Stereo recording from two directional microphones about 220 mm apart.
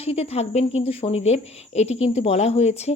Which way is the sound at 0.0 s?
25° left (ahead or behind).